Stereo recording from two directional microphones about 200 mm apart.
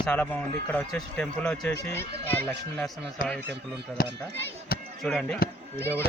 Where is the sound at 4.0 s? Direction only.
45° left (ahead or behind).